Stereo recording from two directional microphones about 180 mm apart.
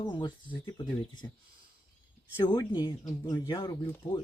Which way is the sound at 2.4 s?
25° left (ahead or behind).